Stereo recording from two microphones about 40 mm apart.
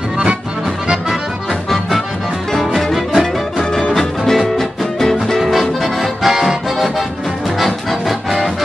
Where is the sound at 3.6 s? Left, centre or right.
Left.